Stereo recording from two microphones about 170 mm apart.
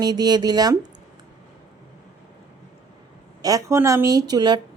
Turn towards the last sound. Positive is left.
turn(degrees=-25)  # may be behind; listen again after turning